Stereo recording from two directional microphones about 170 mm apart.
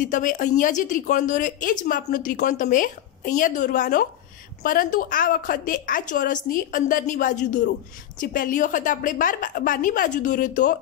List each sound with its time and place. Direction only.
0.0 s a woman's voice: 50° left (ahead or behind)